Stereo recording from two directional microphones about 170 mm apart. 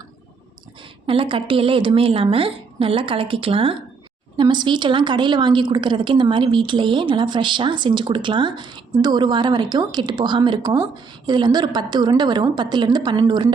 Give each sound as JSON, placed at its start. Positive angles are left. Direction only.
{"t": 1.0, "sound": "a woman's voice", "side_deg": -30}